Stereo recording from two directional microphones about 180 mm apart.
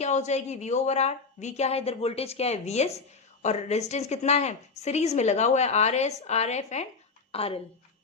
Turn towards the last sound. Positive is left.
turn(degrees=30)  # may be behind; listen again after turning